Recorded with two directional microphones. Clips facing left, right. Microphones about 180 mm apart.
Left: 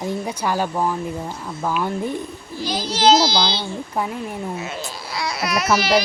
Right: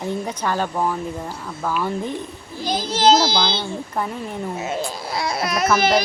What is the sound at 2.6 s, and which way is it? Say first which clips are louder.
Speech: right 2 dB; 50° right (ahead or behind).